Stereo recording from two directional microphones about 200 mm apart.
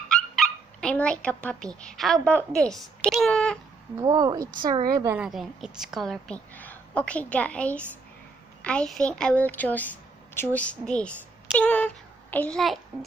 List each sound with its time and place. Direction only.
0.1 s dog: 5° left (ahead or behind)
1.8 s a woman's voice: 5° left (ahead or behind)
3.9 s a woman's voice: 20° right (ahead or behind)
5.1 s a woman's voice: 5° right (ahead or behind)